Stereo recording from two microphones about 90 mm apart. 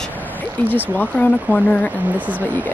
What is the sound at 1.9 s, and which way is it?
Speech, 20° right (ahead or behind).